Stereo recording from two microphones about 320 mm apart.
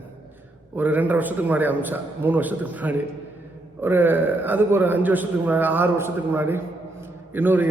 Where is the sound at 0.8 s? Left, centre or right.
Centre.